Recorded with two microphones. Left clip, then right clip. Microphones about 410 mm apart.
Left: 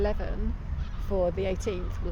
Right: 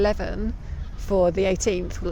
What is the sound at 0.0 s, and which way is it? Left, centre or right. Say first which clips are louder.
Speech: right 8 dB; right.